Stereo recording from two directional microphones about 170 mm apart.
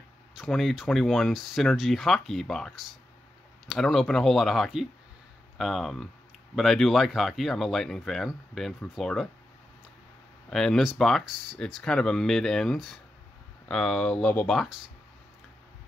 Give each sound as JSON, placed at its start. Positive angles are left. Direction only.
{"t": 0.3, "sound": "speech", "side_deg": 0}
{"t": 10.5, "sound": "speech", "side_deg": 0}